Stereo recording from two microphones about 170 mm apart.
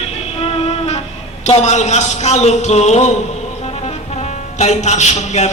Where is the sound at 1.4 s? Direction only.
40° left (ahead or behind).